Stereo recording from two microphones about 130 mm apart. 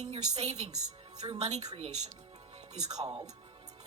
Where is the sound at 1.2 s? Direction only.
55° right (ahead or behind).